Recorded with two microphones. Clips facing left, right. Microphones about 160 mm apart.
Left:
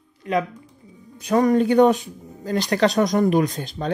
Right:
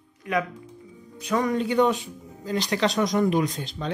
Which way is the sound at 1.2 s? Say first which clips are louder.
Left 7 dB; 40° left (ahead or behind).